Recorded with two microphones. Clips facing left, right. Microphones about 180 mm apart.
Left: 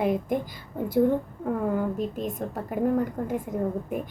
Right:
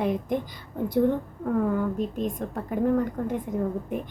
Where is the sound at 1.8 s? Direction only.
5° left (ahead or behind).